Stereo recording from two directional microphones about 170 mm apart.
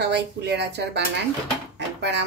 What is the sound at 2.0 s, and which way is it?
Speech, 90° right.